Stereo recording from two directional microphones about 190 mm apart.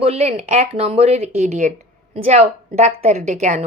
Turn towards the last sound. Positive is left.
turn(degrees=-35)  # may be behind; listen again after turning